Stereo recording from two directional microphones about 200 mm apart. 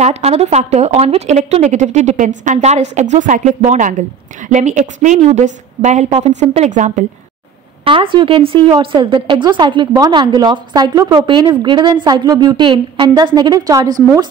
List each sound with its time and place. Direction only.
0.0 s speech: 35° right (ahead or behind)
7.8 s a woman's voice: 25° right (ahead or behind)